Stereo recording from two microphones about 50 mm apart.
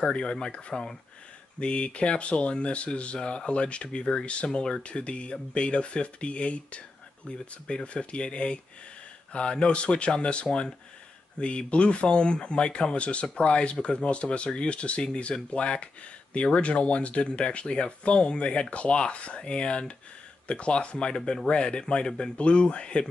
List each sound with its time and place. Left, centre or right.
0.0 s speech: centre